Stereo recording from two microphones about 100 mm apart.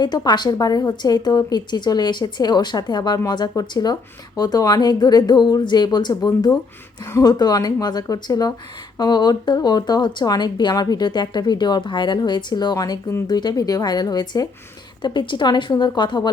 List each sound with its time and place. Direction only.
0.3 s speech: 45° left (ahead or behind)
13.2 s speech: 45° left (ahead or behind)